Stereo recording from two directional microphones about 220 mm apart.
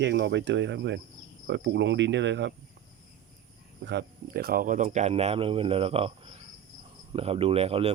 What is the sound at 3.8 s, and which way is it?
Speech, 50° right (ahead or behind).